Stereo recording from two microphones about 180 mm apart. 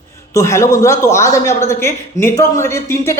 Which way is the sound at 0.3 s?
15° left (ahead or behind).